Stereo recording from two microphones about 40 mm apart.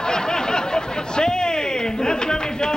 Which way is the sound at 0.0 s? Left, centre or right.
Centre.